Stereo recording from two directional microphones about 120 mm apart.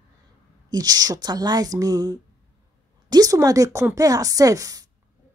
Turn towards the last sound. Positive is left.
turn(degrees=-30)  # may be behind; listen again after turning